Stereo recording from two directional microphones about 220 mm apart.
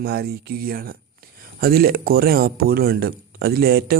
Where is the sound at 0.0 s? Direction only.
45° right (ahead or behind).